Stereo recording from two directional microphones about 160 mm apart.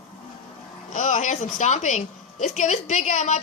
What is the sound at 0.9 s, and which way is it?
A woman's voice, 50° left (ahead or behind).